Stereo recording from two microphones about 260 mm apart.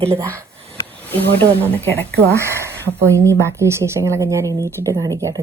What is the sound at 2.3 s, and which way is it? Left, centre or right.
A woman's voice, centre.